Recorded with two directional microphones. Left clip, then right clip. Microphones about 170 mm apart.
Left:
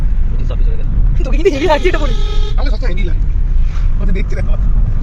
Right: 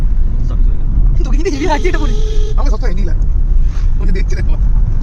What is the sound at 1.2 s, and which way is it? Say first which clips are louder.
Speech: left 5 dB; 25° left (ahead or behind).